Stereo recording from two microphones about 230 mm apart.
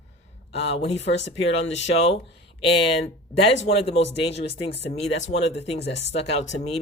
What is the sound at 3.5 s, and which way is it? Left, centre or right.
Speech, left.